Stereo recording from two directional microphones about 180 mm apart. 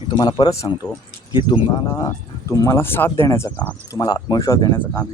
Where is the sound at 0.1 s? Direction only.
25° left (ahead or behind).